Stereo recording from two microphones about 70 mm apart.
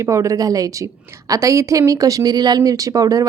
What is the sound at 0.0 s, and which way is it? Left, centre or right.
A woman's voice, right.